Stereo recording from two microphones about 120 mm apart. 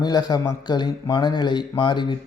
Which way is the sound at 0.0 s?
35° left (ahead or behind).